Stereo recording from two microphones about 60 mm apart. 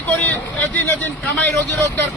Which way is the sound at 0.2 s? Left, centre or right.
Left.